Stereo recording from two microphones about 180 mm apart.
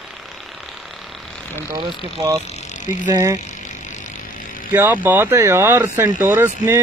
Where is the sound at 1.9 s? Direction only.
20° right (ahead or behind).